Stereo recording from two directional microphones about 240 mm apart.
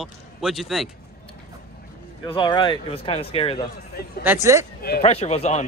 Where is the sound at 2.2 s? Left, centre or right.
Centre.